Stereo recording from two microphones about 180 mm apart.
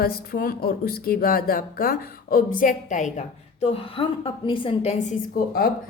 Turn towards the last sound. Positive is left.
turn(degrees=55)  # may be behind; listen again after turning